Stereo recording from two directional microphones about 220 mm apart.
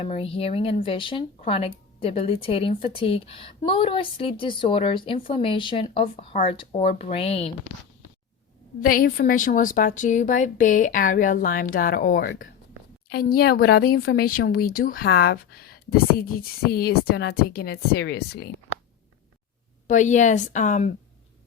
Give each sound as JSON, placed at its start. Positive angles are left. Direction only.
{"t": 0.0, "sound": "a woman's voice", "side_deg": 25}
{"t": 8.8, "sound": "a woman's voice", "side_deg": 40}
{"t": 19.9, "sound": "a woman's voice", "side_deg": 35}